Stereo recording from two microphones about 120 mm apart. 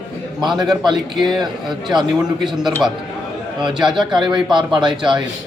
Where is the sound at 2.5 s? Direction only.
5° right (ahead or behind).